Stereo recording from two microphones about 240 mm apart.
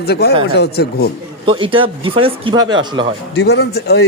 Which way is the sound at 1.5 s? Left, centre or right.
Right.